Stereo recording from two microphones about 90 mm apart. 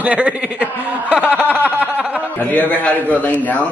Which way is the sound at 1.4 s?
20° right (ahead or behind).